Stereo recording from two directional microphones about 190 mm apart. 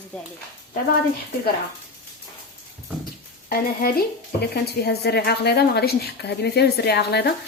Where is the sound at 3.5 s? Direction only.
50° left (ahead or behind).